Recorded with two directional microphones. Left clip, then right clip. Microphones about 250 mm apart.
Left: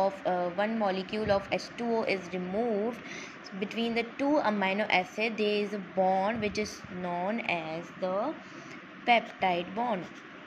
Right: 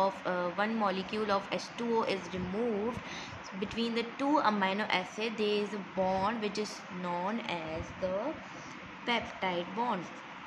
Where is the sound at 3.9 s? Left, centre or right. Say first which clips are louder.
Left 2 dB; centre.